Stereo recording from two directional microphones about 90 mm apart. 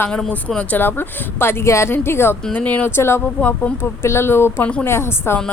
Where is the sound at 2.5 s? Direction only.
15° left (ahead or behind).